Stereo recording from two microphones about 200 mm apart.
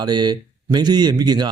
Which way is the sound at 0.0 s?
20° right (ahead or behind).